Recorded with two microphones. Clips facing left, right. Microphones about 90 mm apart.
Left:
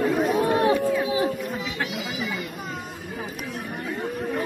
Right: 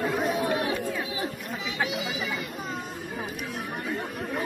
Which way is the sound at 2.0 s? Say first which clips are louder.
Left 1 dB; centre (ahead or behind).